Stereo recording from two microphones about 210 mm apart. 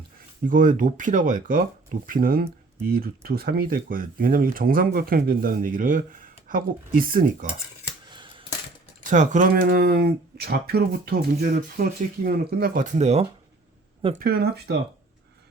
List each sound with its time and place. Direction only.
0.4 s speech: 40° right (ahead or behind)
8.1 s coin: 25° right (ahead or behind)
9.0 s speech: 35° right (ahead or behind)
14.2 s speech: 45° right (ahead or behind)